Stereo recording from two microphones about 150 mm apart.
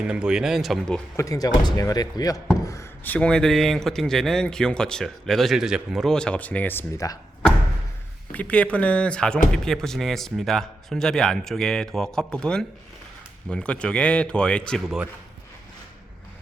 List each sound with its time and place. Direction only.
0.0 s speech: 5° right (ahead or behind)
1.1 s speech: 20° left (ahead or behind)
8.3 s speech: 10° left (ahead or behind)